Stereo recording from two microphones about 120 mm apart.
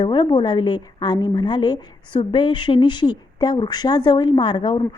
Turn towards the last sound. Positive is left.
turn(degrees=40)  # may be behind; listen again after turning